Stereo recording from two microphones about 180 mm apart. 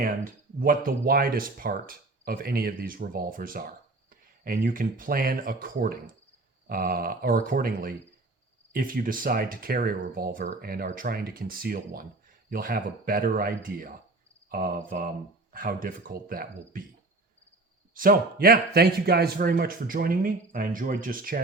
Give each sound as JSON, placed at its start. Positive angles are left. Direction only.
{"t": 0.0, "sound": "speech", "side_deg": -50}
{"t": 17.9, "sound": "speech", "side_deg": -50}